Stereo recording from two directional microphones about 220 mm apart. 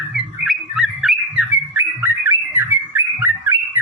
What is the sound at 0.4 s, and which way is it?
Bird, 5° right (ahead or behind).